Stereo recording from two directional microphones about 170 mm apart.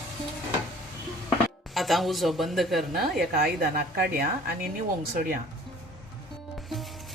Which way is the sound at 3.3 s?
65° right (ahead or behind).